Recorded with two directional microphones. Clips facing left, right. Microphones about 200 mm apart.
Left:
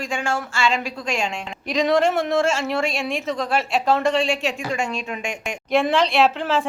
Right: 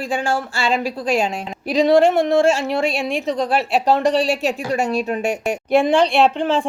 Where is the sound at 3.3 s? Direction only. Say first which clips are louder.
Right 6 dB; 35° right (ahead or behind).